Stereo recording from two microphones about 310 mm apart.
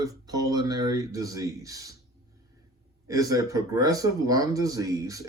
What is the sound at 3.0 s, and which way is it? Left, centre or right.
Speech, centre.